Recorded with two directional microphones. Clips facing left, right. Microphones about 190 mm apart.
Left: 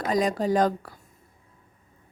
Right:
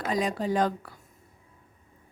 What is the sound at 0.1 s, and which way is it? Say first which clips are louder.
Speech: left 4 dB; 40° left (ahead or behind).